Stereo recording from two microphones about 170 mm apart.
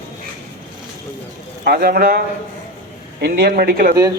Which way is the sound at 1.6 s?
65° right (ahead or behind).